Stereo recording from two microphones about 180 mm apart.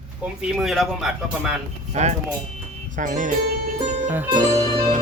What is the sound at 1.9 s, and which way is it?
A man's voice, 40° right (ahead or behind).